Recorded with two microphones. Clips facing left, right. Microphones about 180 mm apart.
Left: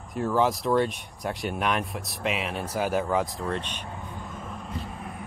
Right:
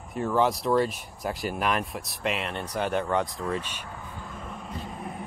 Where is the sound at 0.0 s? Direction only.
Centre (ahead or behind).